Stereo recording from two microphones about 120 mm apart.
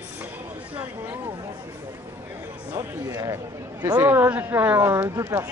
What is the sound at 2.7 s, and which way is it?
Speech, 30° right (ahead or behind).